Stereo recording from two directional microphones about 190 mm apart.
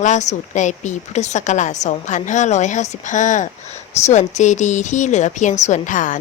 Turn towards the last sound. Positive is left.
turn(degrees=40)  # may be behind; listen again after turning